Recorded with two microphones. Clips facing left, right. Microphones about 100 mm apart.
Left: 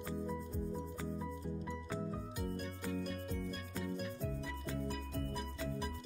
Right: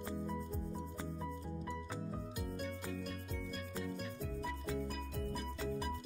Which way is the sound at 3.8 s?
Centre (ahead or behind).